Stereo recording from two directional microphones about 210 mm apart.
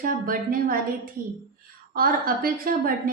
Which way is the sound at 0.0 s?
40° right (ahead or behind).